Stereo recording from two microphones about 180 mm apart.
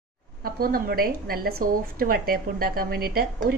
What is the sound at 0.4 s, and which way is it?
A woman's voice, 55° right (ahead or behind).